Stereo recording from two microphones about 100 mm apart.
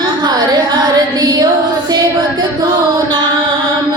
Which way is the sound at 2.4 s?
45° right (ahead or behind).